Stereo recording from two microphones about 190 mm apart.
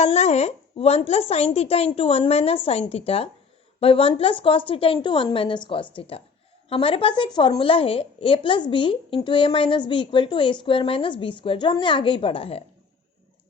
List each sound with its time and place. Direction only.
0.0 s a woman's voice: 35° left (ahead or behind)